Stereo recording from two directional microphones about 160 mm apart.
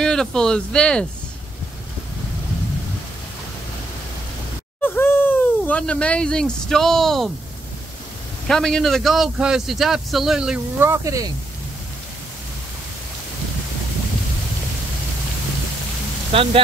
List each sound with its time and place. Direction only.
0.0 s a man's voice: 5° left (ahead or behind)
4.8 s speech: 15° left (ahead or behind)
8.5 s a man's voice: 5° left (ahead or behind); by 11.3 s 20° right (ahead or behind)
16.3 s speech: 35° right (ahead or behind)